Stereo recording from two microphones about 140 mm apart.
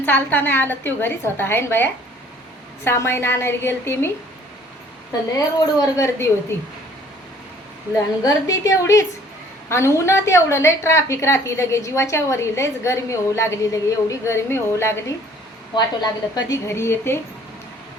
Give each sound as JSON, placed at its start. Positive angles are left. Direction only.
{"t": 0.0, "sound": "a woman's voice", "side_deg": 15}
{"t": 5.5, "sound": "a woman's voice", "side_deg": 20}
{"t": 8.2, "sound": "a woman's voice", "side_deg": 25}
{"t": 15.7, "sound": "a woman's voice", "side_deg": 30}